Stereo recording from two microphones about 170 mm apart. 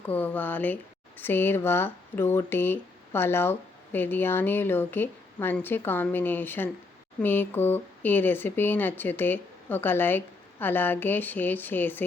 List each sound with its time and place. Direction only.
0.0 s speech: 10° left (ahead or behind)